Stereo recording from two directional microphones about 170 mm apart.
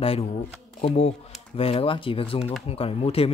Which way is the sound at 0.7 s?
35° left (ahead or behind).